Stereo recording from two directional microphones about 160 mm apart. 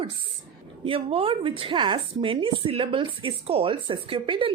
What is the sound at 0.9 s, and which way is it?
Speech, 35° right (ahead or behind).